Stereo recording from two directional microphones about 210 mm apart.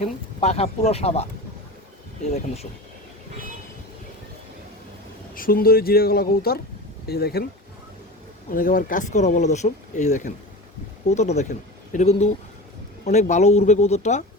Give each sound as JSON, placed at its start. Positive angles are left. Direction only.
{"t": 0.0, "sound": "speech", "side_deg": 30}
{"t": 2.3, "sound": "speech", "side_deg": 30}
{"t": 5.3, "sound": "speech", "side_deg": 45}
{"t": 8.5, "sound": "speech", "side_deg": 40}